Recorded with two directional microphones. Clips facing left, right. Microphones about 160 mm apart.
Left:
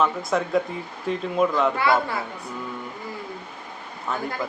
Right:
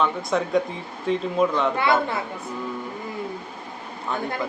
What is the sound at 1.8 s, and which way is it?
Speech, 20° right (ahead or behind).